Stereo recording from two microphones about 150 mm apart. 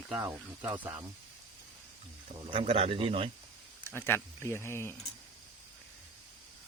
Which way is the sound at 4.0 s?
15° left (ahead or behind).